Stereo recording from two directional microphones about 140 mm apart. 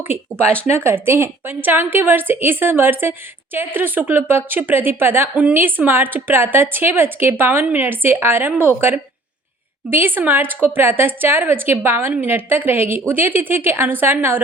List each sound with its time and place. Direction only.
0.1 s a woman's voice: 15° right (ahead or behind)